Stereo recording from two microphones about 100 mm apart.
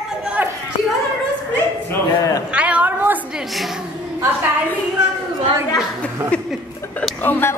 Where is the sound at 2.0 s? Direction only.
40° left (ahead or behind).